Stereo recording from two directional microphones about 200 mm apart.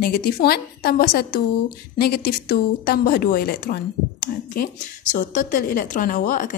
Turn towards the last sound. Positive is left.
turn(degrees=40)  # may be behind; listen again after turning